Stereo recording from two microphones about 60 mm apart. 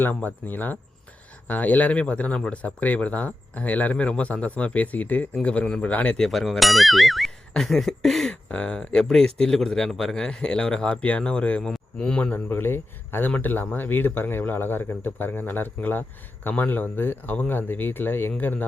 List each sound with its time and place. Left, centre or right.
0.0 s speech: left
6.1 s speech: centre
8.3 s speech: centre
12.3 s speech: left